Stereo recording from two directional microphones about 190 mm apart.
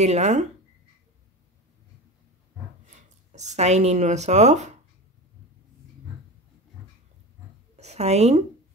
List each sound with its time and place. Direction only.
0.0 s speech: 35° right (ahead or behind)
3.3 s speech: 40° right (ahead or behind)
7.7 s a sound: 35° right (ahead or behind)